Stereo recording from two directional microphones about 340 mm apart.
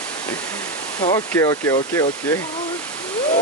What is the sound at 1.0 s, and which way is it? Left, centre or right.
Speech, centre.